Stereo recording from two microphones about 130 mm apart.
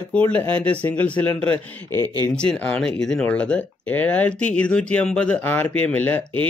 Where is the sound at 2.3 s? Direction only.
10° left (ahead or behind).